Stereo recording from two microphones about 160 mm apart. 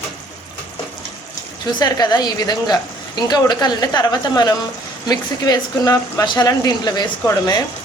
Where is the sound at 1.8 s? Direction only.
25° left (ahead or behind).